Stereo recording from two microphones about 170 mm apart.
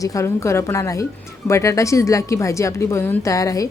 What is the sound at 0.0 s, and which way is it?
A woman's voice, 20° left (ahead or behind).